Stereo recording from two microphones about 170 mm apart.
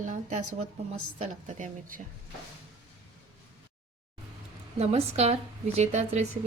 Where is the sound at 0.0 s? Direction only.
45° right (ahead or behind).